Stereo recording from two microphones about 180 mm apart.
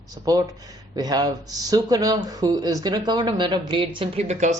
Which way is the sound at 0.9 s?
20° right (ahead or behind).